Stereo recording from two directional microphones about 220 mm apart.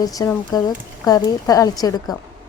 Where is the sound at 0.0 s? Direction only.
15° left (ahead or behind).